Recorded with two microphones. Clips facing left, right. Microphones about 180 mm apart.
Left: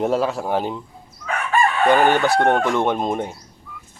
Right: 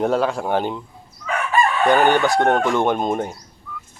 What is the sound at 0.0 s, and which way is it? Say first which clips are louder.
Chicken: right 1 dB; centre (ahead or behind).